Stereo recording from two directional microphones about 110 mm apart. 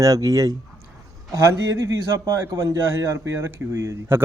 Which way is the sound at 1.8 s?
30° right (ahead or behind).